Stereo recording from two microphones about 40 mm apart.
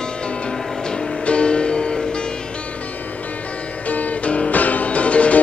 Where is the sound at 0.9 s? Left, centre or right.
Left.